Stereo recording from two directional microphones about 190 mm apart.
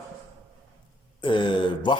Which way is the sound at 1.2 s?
25° left (ahead or behind).